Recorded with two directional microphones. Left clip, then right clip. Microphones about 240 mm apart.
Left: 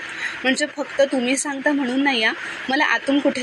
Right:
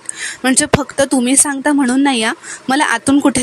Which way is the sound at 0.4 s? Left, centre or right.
Right.